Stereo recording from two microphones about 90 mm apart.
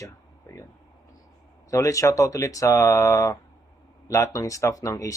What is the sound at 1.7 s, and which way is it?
Speech, 35° left (ahead or behind).